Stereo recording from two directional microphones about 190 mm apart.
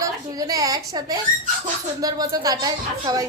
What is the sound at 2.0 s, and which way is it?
A woman's voice, 20° right (ahead or behind).